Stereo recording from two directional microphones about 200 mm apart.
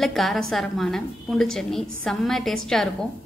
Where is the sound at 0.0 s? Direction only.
Centre (ahead or behind).